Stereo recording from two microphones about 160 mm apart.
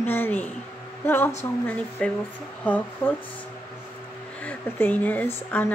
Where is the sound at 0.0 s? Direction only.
15° left (ahead or behind).